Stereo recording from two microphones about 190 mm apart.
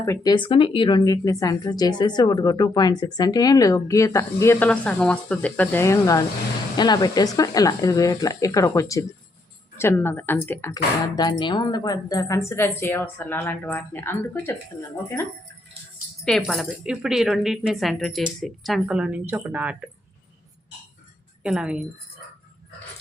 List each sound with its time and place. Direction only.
0.0 s speech: 15° left (ahead or behind)
16.2 s speech: centre (ahead or behind)
21.4 s speech: 5° right (ahead or behind)